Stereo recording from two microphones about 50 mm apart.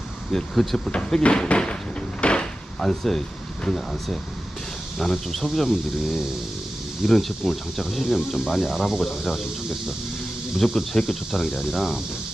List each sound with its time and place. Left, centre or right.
0.3 s speech: centre
0.9 s cupboard open or close: left; by 3.2 s centre
3.6 s speech: centre
10.8 s speech: centre